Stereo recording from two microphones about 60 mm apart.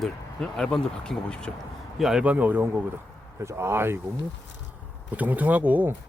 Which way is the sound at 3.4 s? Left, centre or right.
Right.